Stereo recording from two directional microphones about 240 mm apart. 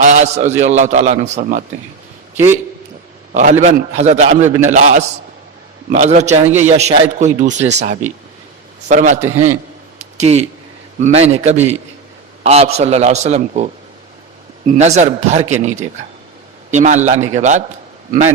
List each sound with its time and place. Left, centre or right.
0.0 s a man's voice: right
3.3 s a man's voice: right
10.2 s speech: right
14.7 s speech: right